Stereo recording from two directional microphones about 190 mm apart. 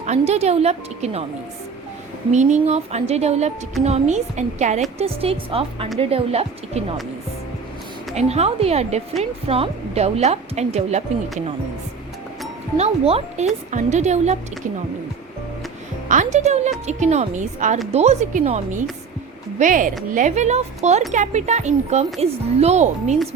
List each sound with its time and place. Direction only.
0.0 s a woman's voice: 35° right (ahead or behind)
2.3 s a woman's voice: 40° right (ahead or behind)
8.1 s a woman's voice: 35° right (ahead or behind)
12.7 s a woman's voice: 35° right (ahead or behind)
16.0 s a woman's voice: 40° right (ahead or behind)